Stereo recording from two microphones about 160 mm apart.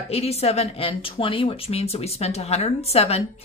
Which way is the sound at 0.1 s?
40° left (ahead or behind).